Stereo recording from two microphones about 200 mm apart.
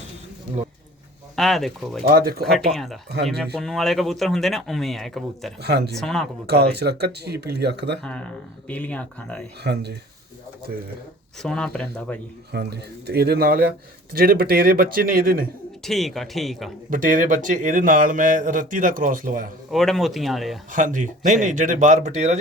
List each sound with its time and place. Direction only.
1.4 s speech: centre (ahead or behind)
2.0 s speech: 50° right (ahead or behind)
2.4 s speech: centre (ahead or behind)
5.6 s speech: 55° right (ahead or behind)
5.9 s speech: centre (ahead or behind)
6.5 s speech: 55° right (ahead or behind)
8.0 s speech: 5° left (ahead or behind)
9.6 s speech: 55° right (ahead or behind)
11.4 s speech: 5° left (ahead or behind)
12.5 s speech: 55° right (ahead or behind)
15.8 s speech: centre (ahead or behind)
16.9 s a man's voice: 40° right (ahead or behind)
19.7 s speech: centre (ahead or behind)
20.7 s a man's voice: 40° right (ahead or behind)